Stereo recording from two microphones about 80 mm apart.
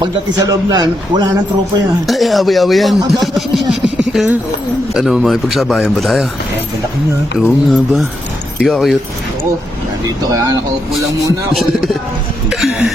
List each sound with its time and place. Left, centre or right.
0.0 s a man's voice: right
2.0 s speech: centre
4.9 s speech: centre
7.3 s speech: centre
12.5 s speech: centre